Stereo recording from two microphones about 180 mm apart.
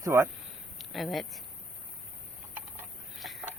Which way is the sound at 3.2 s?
Centre (ahead or behind).